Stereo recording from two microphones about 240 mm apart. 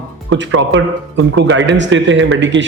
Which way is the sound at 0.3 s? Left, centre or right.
Right.